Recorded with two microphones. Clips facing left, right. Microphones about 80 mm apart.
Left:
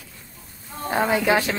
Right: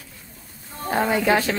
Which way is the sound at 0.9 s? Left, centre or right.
Centre.